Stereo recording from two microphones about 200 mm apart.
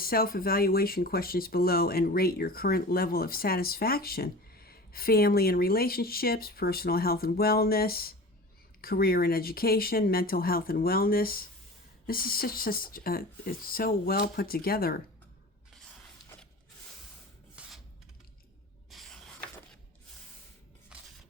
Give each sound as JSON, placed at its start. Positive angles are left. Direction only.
{"t": 0.0, "sound": "speech", "side_deg": 50}
{"t": 17.5, "sound": "filing", "side_deg": -5}
{"t": 18.9, "sound": "rub", "side_deg": 0}
{"t": 20.9, "sound": "coin", "side_deg": -5}